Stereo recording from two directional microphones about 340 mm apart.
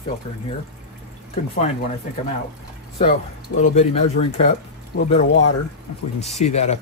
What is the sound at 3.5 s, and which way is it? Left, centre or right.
Speech, left.